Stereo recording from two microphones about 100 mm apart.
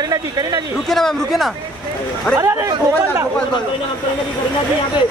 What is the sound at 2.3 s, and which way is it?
Speech, 30° right (ahead or behind).